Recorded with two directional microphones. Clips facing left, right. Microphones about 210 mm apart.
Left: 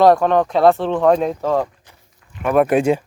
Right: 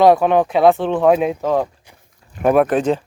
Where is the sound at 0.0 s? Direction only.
5° right (ahead or behind).